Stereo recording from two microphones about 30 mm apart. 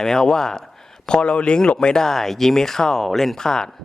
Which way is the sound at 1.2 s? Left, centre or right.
Left.